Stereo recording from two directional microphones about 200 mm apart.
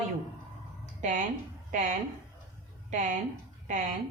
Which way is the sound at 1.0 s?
40° right (ahead or behind).